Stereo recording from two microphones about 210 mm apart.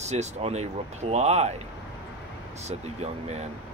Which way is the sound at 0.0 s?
30° right (ahead or behind).